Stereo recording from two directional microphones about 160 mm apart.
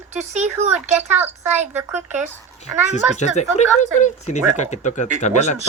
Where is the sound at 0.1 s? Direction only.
45° right (ahead or behind).